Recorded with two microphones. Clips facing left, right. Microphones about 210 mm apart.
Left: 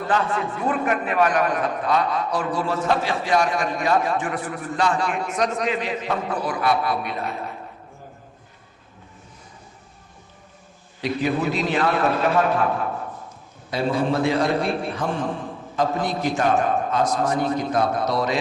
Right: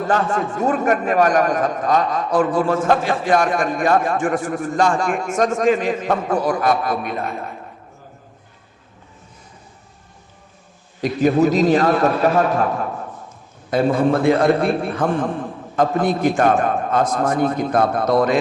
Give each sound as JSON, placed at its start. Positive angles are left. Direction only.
{"t": 0.1, "sound": "a man's voice", "side_deg": -45}
{"t": 11.0, "sound": "a man's voice", "side_deg": -45}
{"t": 13.7, "sound": "a man's voice", "side_deg": -50}